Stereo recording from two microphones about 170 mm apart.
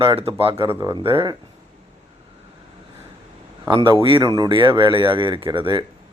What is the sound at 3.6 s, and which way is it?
Speech, 25° right (ahead or behind).